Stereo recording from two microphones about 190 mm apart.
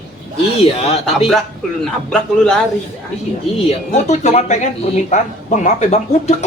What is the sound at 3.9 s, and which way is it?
A man's voice, 35° left (ahead or behind).